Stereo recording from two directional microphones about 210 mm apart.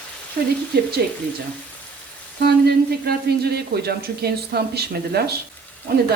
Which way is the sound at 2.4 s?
50° right (ahead or behind).